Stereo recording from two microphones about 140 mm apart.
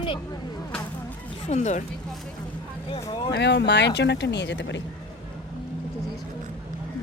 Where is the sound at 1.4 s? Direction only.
55° left (ahead or behind).